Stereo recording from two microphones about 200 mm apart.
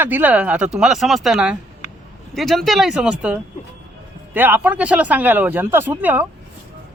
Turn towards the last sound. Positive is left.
turn(degrees=-10)  # may be behind; listen again after turning